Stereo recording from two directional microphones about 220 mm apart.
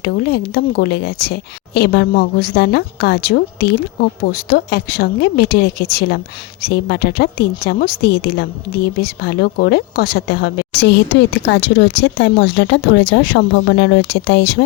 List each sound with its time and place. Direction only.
0.0 s a woman's voice: 45° left (ahead or behind)